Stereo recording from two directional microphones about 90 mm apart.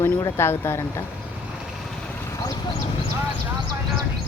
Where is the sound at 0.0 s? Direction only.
35° left (ahead or behind).